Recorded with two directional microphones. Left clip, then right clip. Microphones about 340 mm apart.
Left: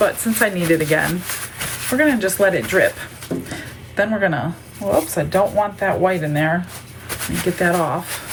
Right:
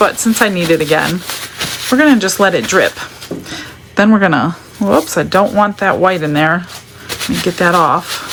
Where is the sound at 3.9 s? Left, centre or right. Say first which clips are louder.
Right 7 dB; centre.